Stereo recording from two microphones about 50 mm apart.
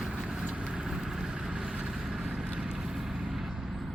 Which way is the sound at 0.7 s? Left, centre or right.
Centre.